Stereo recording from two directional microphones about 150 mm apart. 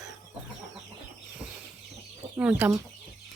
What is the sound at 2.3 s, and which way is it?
Speech, 10° right (ahead or behind).